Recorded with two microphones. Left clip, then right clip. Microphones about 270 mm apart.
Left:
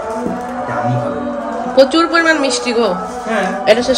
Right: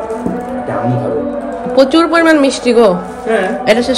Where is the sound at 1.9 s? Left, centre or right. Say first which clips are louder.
Right 3 dB; centre.